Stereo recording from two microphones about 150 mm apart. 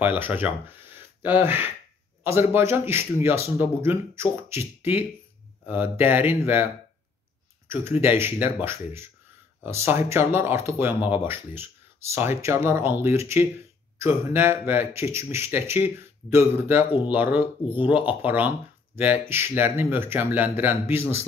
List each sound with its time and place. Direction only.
0.0 s speech: 10° right (ahead or behind)